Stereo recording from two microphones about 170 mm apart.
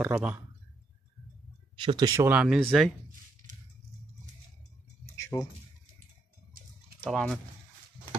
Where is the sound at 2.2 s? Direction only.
5° right (ahead or behind).